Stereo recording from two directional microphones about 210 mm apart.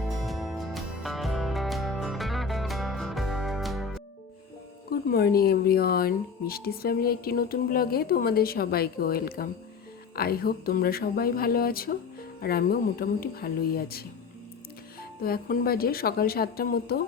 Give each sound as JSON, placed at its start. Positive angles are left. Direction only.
{"t": 0.0, "sound": "music", "side_deg": 0}
{"t": 4.9, "sound": "speech", "side_deg": 45}
{"t": 15.2, "sound": "speech", "side_deg": 45}